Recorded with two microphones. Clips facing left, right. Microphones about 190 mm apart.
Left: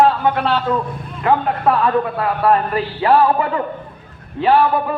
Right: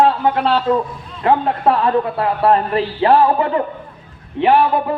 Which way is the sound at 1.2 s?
25° right (ahead or behind).